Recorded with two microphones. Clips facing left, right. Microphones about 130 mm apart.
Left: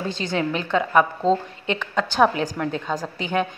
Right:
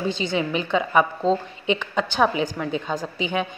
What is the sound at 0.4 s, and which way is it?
A woman's voice, 5° right (ahead or behind).